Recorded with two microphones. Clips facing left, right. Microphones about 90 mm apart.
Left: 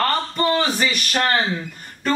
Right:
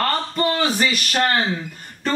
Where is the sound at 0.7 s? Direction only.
5° right (ahead or behind).